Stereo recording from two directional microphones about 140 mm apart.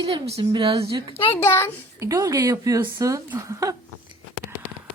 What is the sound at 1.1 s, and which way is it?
Speech, 40° left (ahead or behind).